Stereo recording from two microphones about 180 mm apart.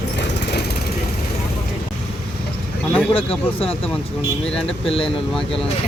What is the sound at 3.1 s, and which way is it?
Speech, 30° left (ahead or behind).